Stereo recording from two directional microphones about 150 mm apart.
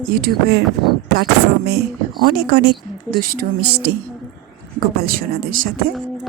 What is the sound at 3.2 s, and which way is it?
Speech, 75° right (ahead or behind).